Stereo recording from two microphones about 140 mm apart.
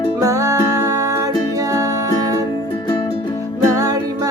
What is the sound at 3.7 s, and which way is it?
Music, 25° right (ahead or behind).